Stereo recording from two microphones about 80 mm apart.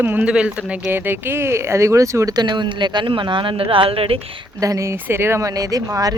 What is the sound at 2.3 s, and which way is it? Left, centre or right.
Speech, right.